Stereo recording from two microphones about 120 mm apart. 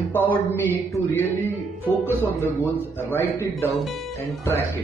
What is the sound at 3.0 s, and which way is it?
Speech, 20° left (ahead or behind).